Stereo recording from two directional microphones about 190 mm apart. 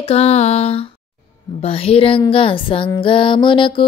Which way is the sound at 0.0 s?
35° left (ahead or behind).